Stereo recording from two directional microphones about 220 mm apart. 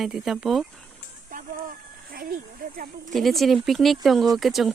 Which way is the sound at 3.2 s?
Centre (ahead or behind).